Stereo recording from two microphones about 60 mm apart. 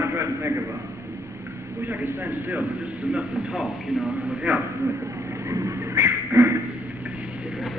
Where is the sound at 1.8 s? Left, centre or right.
Right; by 4.1 s centre.